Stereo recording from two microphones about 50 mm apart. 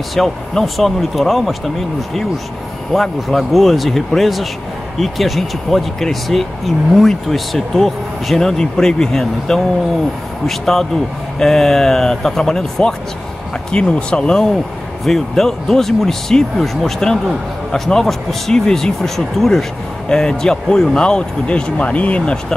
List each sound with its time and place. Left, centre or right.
0.1 s speech: centre
2.9 s speech: centre
13.7 s speech: centre
15.0 s speech: centre; by 22.4 s left